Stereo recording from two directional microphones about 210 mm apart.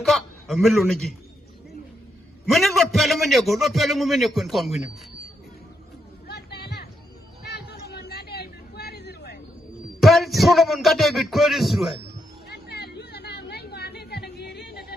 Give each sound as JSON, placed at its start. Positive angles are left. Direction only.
{"t": 0.0, "sound": "a man's voice", "side_deg": 0}
{"t": 2.5, "sound": "a man's voice", "side_deg": 0}
{"t": 6.2, "sound": "a sound", "side_deg": 50}
{"t": 7.4, "sound": "vehicle", "side_deg": 50}
{"t": 10.0, "sound": "a man's voice", "side_deg": 0}
{"t": 12.5, "sound": "chatter", "side_deg": 50}